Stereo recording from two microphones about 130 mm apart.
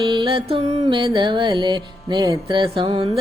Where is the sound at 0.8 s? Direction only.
40° right (ahead or behind).